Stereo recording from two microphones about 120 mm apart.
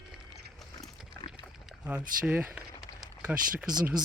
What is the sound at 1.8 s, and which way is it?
Speech, 10° right (ahead or behind).